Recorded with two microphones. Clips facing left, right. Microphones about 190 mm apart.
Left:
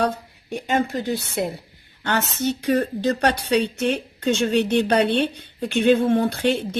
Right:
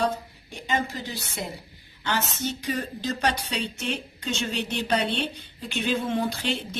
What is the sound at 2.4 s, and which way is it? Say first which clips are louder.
Speech: left 9 dB; 60° left (ahead or behind).